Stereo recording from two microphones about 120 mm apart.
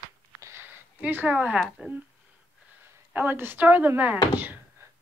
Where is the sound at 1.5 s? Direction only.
Centre (ahead or behind).